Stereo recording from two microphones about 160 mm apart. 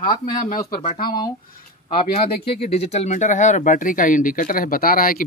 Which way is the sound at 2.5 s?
40° left (ahead or behind).